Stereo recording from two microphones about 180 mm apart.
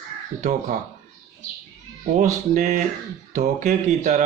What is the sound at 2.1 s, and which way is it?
Speech, 45° right (ahead or behind).